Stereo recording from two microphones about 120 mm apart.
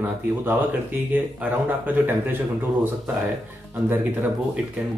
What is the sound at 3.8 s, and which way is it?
Speech, 15° right (ahead or behind).